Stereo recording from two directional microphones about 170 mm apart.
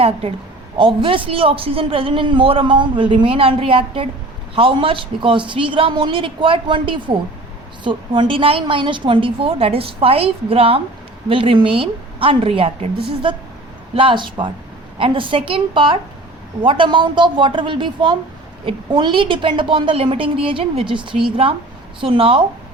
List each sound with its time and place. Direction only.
0.0 s a man's voice: 35° right (ahead or behind)
13.9 s a woman's voice: 30° right (ahead or behind)